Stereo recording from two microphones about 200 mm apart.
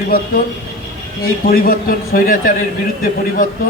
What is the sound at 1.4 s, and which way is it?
A man's voice, 45° left (ahead or behind).